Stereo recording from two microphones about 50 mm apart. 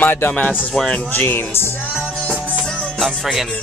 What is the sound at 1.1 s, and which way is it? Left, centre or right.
Speech, left.